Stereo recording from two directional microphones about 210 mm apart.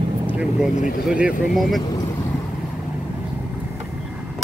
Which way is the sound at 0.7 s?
40° left (ahead or behind).